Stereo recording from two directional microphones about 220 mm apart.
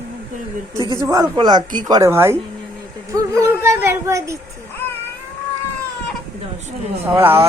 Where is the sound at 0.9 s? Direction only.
15° right (ahead or behind).